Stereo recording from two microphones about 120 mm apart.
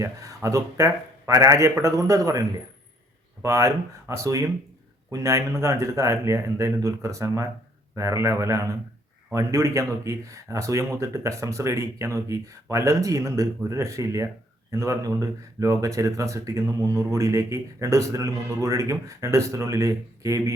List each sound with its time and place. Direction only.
0.0 s speech: 25° right (ahead or behind)